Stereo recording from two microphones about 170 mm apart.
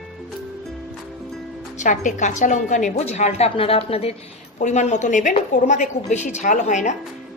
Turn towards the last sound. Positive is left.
turn(degrees=45)  # may be behind; listen again after turning